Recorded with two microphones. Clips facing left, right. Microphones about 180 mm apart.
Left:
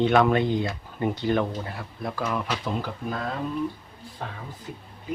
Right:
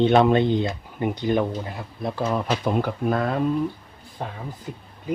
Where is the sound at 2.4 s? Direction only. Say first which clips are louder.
Right 6 dB; 50° right (ahead or behind).